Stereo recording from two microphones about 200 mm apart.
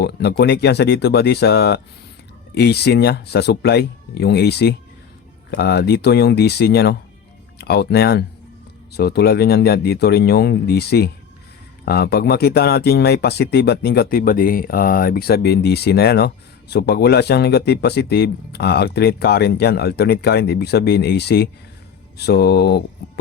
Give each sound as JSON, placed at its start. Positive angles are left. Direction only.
{"t": 0.0, "sound": "speech", "side_deg": 55}